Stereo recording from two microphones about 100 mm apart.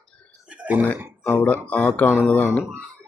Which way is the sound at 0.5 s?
15° right (ahead or behind).